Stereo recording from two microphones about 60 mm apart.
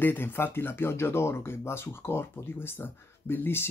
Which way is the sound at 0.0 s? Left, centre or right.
Left.